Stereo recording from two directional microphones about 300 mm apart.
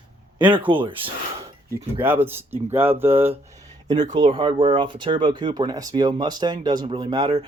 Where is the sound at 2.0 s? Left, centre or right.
Centre.